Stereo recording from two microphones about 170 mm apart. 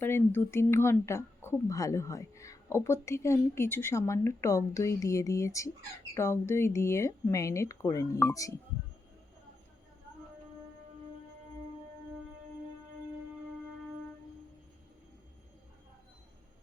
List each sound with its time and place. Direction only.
0.0 s speech: 15° left (ahead or behind)